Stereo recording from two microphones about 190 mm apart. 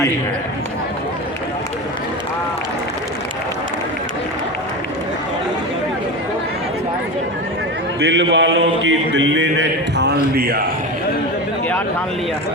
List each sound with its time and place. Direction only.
8.1 s speech: 75° right (ahead or behind)
10.3 s speech: 55° right (ahead or behind)